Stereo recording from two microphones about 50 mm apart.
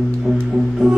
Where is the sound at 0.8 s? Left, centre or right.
Right.